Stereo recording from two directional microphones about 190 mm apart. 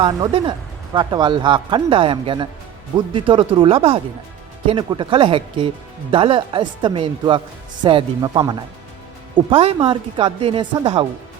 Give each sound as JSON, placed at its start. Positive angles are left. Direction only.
{"t": 0.0, "sound": "speech", "side_deg": -25}